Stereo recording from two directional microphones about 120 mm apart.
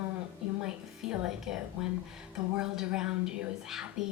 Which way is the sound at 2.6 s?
5° right (ahead or behind).